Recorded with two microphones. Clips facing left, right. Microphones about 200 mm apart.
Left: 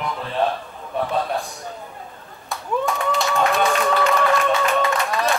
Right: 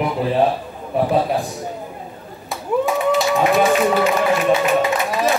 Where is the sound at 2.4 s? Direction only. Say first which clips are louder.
Right 4 dB; 5° right (ahead or behind).